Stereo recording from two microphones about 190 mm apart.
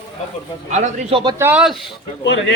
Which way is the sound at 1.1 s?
25° right (ahead or behind).